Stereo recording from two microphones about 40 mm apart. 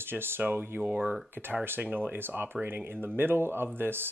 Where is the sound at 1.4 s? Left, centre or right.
Left.